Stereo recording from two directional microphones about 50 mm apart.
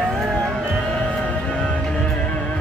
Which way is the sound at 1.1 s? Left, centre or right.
Left.